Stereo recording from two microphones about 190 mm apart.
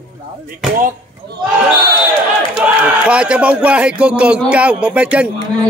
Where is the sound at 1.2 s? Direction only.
65° right (ahead or behind).